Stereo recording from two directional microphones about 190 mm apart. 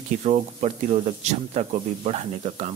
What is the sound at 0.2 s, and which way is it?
Speech, 35° right (ahead or behind).